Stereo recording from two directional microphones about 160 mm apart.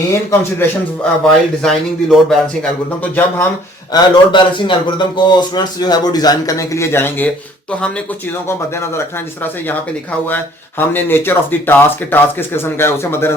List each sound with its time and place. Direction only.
0.1 s speech: 20° left (ahead or behind)
1.2 s speech: centre (ahead or behind)
3.0 s speech: 15° left (ahead or behind)
3.9 s a man's voice: 30° left (ahead or behind); by 7.3 s 15° left (ahead or behind)
8.4 s speech: 15° left (ahead or behind)